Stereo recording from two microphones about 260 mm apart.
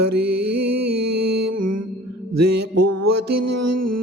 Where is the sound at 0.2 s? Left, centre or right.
Right.